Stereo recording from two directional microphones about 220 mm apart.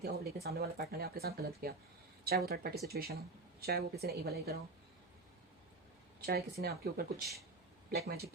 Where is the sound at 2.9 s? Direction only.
45° right (ahead or behind).